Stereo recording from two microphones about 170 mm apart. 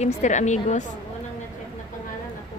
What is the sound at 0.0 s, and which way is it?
Speech, 45° left (ahead or behind).